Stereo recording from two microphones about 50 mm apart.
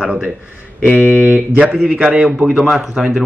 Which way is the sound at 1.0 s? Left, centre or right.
Right.